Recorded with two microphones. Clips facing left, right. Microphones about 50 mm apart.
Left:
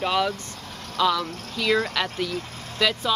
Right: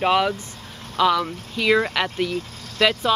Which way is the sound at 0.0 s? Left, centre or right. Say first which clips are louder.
Right 4 dB; right.